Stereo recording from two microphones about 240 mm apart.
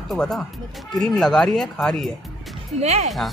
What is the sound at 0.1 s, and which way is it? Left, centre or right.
Speech, centre.